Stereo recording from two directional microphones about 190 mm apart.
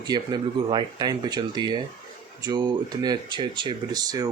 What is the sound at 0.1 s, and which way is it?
Speech, 25° right (ahead or behind).